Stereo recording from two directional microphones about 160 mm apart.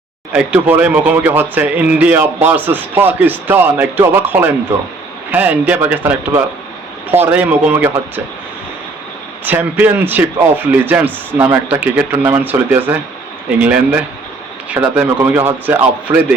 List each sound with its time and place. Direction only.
0.3 s a man's voice: 10° right (ahead or behind)
9.4 s a man's voice: 10° right (ahead or behind)